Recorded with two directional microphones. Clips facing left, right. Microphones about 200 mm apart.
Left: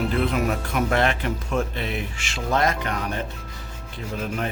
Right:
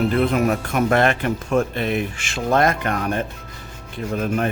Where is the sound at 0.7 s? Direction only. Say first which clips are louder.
Right 3 dB; 50° right (ahead or behind).